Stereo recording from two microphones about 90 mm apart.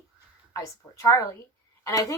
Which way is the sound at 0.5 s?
35° left (ahead or behind).